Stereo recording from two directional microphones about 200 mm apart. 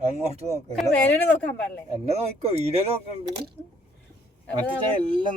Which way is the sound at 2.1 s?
30° right (ahead or behind).